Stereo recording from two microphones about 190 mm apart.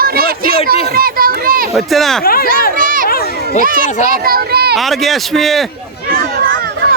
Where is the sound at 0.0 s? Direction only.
55° right (ahead or behind).